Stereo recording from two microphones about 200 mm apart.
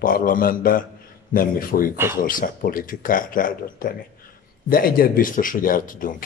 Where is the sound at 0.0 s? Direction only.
45° left (ahead or behind).